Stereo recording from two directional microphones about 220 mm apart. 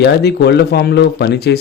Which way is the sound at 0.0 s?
45° left (ahead or behind).